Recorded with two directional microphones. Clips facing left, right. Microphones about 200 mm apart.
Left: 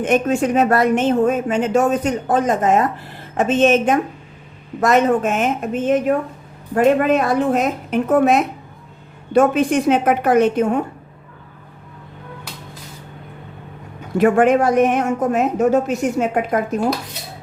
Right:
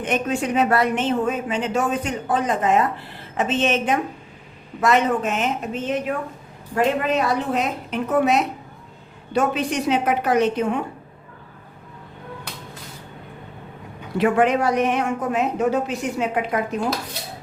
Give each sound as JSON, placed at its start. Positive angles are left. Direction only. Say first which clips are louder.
{"t": 0.0, "sound": "speech", "louder": "left 6 dB", "side_deg": 45}
{"t": 14.2, "sound": "speech", "louder": "left 5 dB", "side_deg": 50}